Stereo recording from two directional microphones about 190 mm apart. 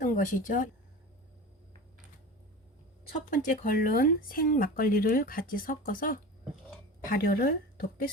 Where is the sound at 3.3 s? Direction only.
45° left (ahead or behind).